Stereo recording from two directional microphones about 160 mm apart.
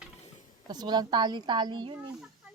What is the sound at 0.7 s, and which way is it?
A woman's voice, 25° right (ahead or behind).